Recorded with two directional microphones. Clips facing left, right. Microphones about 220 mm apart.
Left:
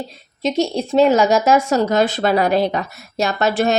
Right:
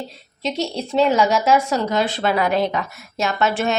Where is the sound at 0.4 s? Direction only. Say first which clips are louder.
Left 5 dB; 45° left (ahead or behind).